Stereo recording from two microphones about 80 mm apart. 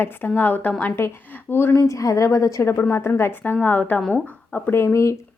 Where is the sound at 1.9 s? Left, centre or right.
Left.